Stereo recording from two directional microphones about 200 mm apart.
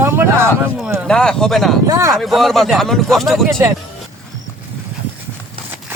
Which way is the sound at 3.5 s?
15° right (ahead or behind).